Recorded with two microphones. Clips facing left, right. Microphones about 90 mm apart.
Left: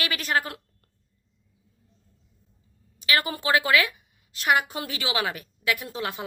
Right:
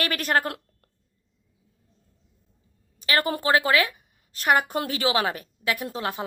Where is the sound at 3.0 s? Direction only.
40° right (ahead or behind).